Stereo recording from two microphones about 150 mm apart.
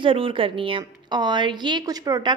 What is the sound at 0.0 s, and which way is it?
A woman's voice, 35° right (ahead or behind).